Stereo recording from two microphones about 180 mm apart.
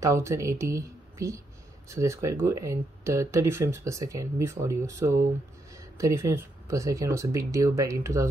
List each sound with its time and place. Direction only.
0.0 s speech: 15° right (ahead or behind)